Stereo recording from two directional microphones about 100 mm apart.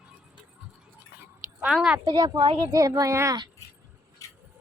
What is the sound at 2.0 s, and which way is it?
Speech, 35° right (ahead or behind).